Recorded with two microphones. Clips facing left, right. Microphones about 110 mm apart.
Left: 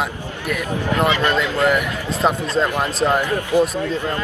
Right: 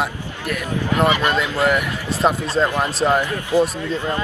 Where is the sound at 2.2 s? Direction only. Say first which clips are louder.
Right 1 dB; 5° right (ahead or behind).